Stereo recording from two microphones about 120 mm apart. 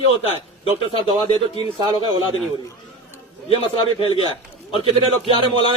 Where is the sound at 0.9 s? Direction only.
55° left (ahead or behind).